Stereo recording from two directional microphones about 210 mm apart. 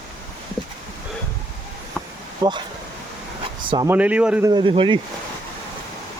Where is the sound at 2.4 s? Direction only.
20° right (ahead or behind).